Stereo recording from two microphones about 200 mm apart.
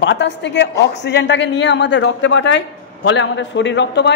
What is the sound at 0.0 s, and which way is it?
Speech, 60° left (ahead or behind).